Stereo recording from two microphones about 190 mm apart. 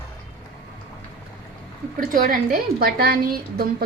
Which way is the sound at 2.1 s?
45° right (ahead or behind).